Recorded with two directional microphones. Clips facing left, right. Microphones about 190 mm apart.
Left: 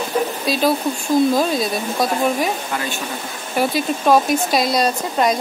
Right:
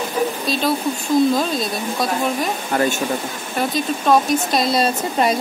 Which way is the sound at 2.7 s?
45° right (ahead or behind).